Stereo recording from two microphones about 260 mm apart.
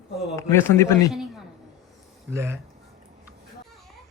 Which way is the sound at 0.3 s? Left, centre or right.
Centre.